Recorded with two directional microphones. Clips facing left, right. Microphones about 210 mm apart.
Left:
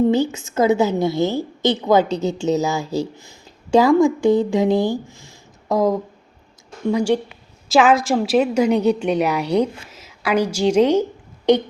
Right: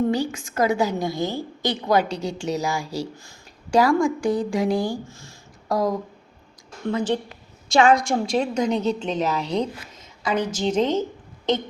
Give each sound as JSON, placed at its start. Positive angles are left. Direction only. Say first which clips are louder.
{"t": 0.1, "sound": "a woman's voice", "louder": "left 5 dB", "side_deg": 25}